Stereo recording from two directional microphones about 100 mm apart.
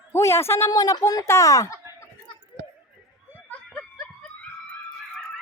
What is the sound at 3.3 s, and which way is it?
Snicker, 10° left (ahead or behind).